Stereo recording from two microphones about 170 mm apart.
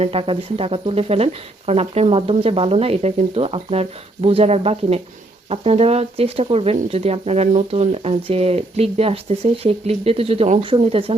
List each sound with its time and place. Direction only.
0.0 s speech: 35° right (ahead or behind)